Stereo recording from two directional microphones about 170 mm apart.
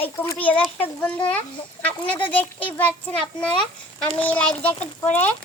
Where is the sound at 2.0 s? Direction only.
30° left (ahead or behind).